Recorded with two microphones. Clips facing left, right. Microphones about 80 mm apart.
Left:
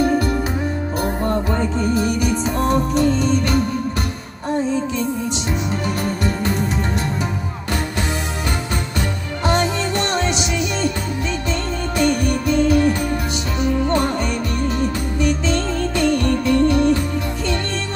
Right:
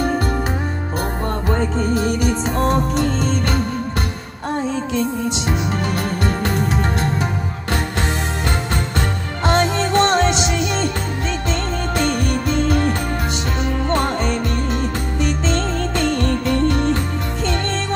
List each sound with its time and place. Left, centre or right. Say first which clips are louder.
0.0 s music: left 2 dB; right
5.7 s music: even; right
9.5 s music: right 2 dB; right
12.0 s music: left 3 dB; right